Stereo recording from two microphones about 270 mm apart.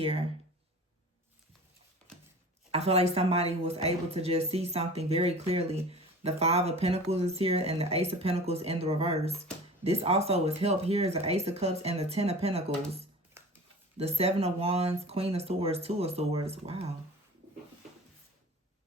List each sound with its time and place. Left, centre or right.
2.7 s speech: right
14.0 s speech: right